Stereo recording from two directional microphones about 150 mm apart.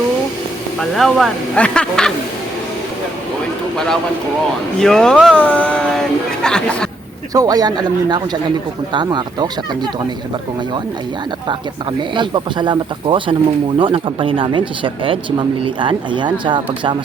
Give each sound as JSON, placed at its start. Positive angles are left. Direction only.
{"t": 0.8, "sound": "speech", "side_deg": 0}
{"t": 4.8, "sound": "speech", "side_deg": 5}
{"t": 7.3, "sound": "speech", "side_deg": -25}
{"t": 12.1, "sound": "speech", "side_deg": -30}